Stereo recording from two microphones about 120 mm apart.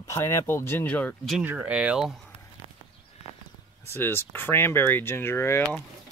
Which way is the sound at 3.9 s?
20° left (ahead or behind).